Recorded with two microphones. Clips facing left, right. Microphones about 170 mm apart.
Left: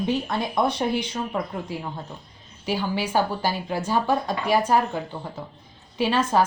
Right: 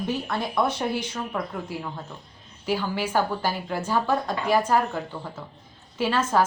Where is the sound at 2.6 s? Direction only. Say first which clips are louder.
Left 1 dB; 15° left (ahead or behind).